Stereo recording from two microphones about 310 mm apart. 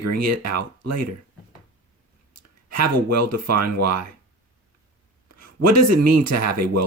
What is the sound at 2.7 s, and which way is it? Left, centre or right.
Speech, right.